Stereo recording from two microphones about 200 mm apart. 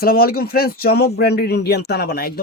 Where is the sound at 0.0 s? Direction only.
50° left (ahead or behind).